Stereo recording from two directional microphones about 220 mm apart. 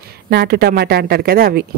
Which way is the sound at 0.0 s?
45° right (ahead or behind).